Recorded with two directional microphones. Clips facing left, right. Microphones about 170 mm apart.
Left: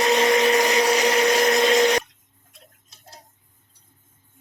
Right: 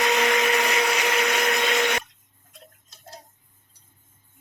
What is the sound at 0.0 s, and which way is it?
Blender, 30° left (ahead or behind).